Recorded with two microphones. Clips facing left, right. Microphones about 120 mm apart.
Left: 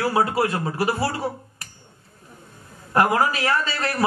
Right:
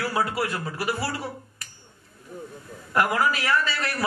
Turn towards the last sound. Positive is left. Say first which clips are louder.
# left 3 dB
turn(degrees=30)  # may be behind; listen again after turning